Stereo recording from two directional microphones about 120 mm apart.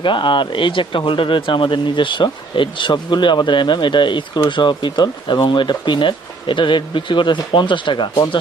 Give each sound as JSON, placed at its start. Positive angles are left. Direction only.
{"t": 0.0, "sound": "speech", "side_deg": 40}